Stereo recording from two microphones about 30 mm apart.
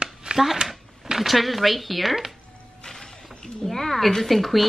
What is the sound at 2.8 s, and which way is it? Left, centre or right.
Music, centre.